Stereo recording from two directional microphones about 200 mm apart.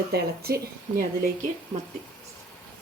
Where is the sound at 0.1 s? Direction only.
50° right (ahead or behind).